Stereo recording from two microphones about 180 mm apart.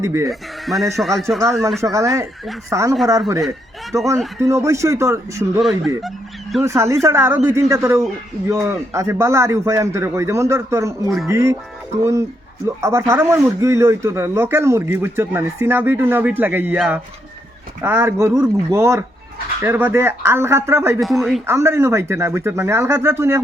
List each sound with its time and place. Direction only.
0.0 s speech: 15° right (ahead or behind)
0.3 s speech: centre (ahead or behind)
1.8 s speech: 15° right (ahead or behind)
5.5 s speech: centre (ahead or behind)
6.6 s speech: 15° right (ahead or behind)
12.6 s speech: 15° right (ahead or behind)
17.8 s speech: 15° right (ahead or behind)
21.0 s speech: centre (ahead or behind)
21.4 s speech: 15° right (ahead or behind)